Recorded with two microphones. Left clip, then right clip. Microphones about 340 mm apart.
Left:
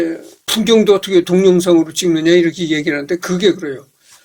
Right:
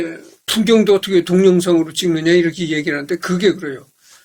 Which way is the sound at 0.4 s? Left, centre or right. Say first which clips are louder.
Left 2 dB; left.